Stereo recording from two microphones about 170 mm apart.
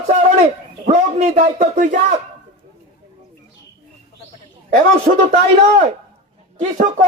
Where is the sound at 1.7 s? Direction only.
50° right (ahead or behind).